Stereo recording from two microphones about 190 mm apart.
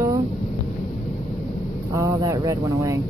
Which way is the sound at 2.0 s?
15° right (ahead or behind).